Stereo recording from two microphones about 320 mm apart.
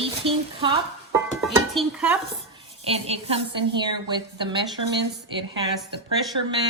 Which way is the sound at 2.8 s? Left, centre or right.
Centre.